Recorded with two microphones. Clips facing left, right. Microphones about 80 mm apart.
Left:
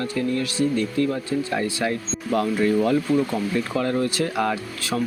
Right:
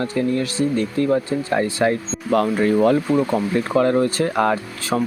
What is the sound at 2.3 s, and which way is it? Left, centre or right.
Speech, right.